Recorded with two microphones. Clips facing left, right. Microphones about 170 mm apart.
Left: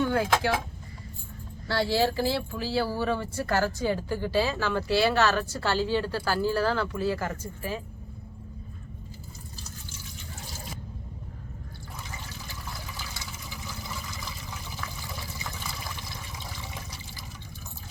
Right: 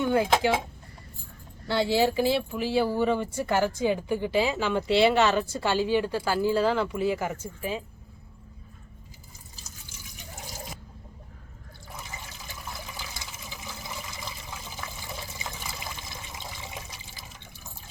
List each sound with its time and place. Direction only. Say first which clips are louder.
0.0 s speech: right 2 dB; 20° right (ahead or behind)
1.6 s speech: right 2 dB; 20° right (ahead or behind)
13.1 s water: left 1 dB; 20° right (ahead or behind)